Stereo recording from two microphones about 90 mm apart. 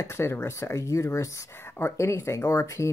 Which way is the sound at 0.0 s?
30° left (ahead or behind).